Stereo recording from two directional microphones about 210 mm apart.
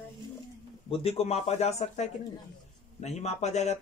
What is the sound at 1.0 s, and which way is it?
Speech, 30° left (ahead or behind).